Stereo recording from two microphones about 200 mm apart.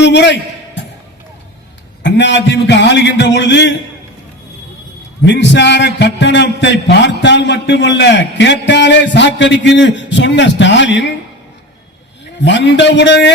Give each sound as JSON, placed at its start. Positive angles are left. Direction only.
{"t": 0.0, "sound": "a sound", "side_deg": 60}
{"t": 2.0, "sound": "a man's voice", "side_deg": 60}
{"t": 5.2, "sound": "a man's voice", "side_deg": 60}
{"t": 12.4, "sound": "a man's voice", "side_deg": 65}